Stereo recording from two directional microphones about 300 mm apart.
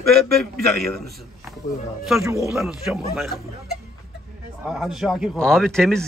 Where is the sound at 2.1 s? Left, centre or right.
Centre.